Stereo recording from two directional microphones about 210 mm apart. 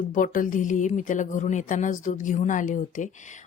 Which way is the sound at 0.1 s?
40° left (ahead or behind).